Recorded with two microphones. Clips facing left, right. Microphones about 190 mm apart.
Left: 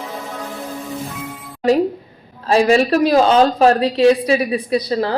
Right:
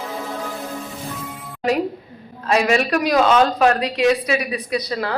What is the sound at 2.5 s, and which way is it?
A woman's voice, 30° left (ahead or behind).